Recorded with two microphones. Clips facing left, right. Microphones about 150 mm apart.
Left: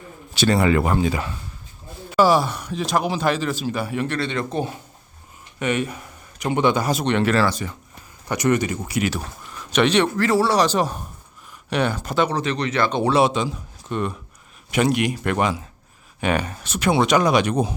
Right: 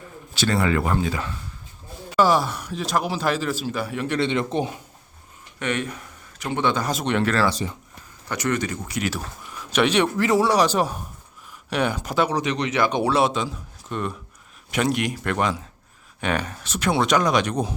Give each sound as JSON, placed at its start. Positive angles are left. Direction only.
{"t": 0.3, "sound": "speech", "side_deg": 15}
{"t": 2.1, "sound": "speech", "side_deg": 5}
{"t": 4.1, "sound": "speech", "side_deg": -20}
{"t": 5.5, "sound": "speech", "side_deg": 5}
{"t": 7.0, "sound": "speech", "side_deg": -5}
{"t": 7.3, "sound": "speech", "side_deg": 10}
{"t": 13.1, "sound": "speech", "side_deg": 0}